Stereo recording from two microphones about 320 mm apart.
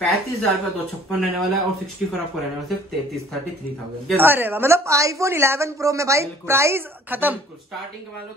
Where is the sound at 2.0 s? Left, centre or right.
Centre.